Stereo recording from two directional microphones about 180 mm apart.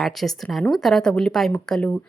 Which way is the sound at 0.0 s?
Centre (ahead or behind).